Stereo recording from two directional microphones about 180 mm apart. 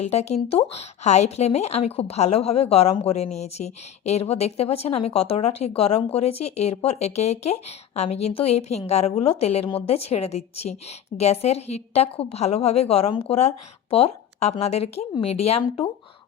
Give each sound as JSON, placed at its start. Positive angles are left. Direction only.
{"t": 0.1, "sound": "a woman's voice", "side_deg": 35}